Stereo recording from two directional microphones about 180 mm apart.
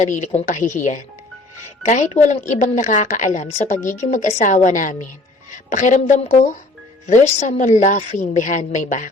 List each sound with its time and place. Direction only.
0.0 s a woman's voice: 45° left (ahead or behind)